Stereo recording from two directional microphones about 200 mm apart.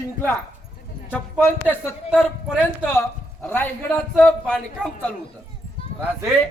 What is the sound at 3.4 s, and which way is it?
A man's voice, 10° left (ahead or behind).